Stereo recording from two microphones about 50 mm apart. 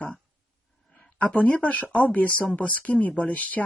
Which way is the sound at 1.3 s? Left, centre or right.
Left.